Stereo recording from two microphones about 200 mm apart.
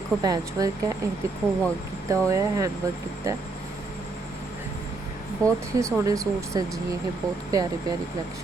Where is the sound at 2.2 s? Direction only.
15° right (ahead or behind).